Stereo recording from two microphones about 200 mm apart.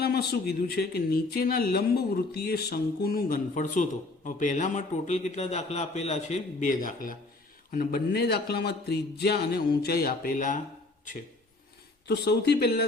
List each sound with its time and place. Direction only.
0.0 s a man's voice: 55° left (ahead or behind)
12.0 s speech: 55° left (ahead or behind)